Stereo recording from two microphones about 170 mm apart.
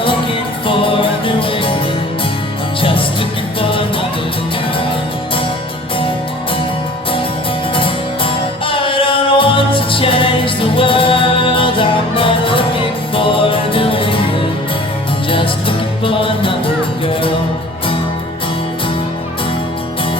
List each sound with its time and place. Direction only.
0.7 s music: 30° left (ahead or behind)
3.6 s music: 30° left (ahead or behind)
7.8 s music: 30° left (ahead or behind)
16.0 s music: 30° left (ahead or behind)